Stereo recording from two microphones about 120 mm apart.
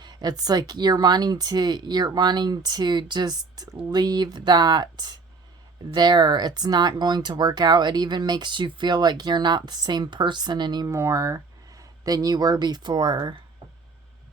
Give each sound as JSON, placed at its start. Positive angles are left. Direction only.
{"t": 0.0, "sound": "speech", "side_deg": -35}